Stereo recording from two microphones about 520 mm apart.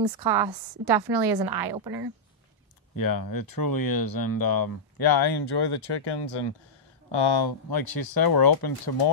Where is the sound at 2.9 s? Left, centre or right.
Left.